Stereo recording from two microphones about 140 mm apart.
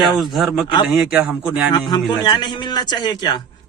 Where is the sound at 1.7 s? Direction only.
30° left (ahead or behind).